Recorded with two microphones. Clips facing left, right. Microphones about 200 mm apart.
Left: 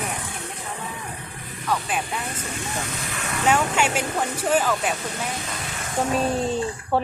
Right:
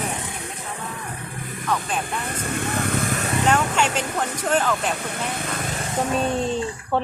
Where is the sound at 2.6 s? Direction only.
60° right (ahead or behind).